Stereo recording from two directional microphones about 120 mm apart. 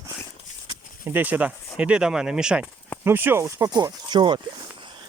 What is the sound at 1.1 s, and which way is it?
Speech, 15° right (ahead or behind).